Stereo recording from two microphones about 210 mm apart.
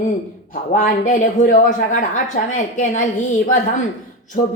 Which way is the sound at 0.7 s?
40° left (ahead or behind).